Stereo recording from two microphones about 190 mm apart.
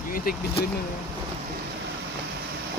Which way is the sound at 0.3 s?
50° left (ahead or behind).